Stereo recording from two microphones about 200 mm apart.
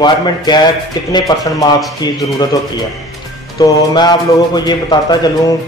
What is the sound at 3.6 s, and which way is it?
A man's voice, 20° left (ahead or behind).